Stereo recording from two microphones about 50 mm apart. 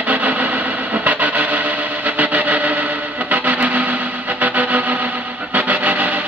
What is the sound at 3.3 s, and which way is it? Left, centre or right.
Music, right.